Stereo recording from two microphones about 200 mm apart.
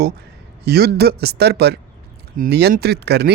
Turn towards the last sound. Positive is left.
turn(degrees=-55)  # may be behind; listen again after turning